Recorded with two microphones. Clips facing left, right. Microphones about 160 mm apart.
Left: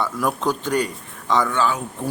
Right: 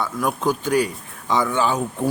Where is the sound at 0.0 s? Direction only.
Centre (ahead or behind).